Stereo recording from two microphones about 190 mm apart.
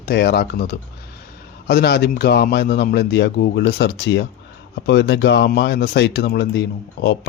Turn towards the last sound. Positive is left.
turn(degrees=60)  # may be behind; listen again after turning